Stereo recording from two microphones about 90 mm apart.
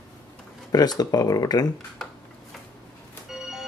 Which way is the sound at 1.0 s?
45° left (ahead or behind).